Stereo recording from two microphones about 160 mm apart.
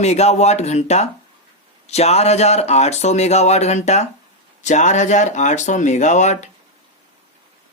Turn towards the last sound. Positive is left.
turn(degrees=45)  # may be behind; listen again after turning